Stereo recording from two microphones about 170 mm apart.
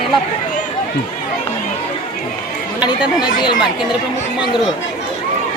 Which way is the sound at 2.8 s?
25° left (ahead or behind).